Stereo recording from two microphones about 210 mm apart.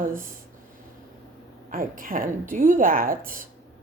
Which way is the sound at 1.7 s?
40° right (ahead or behind).